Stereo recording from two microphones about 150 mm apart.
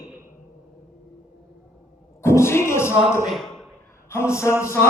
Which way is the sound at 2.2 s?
15° left (ahead or behind).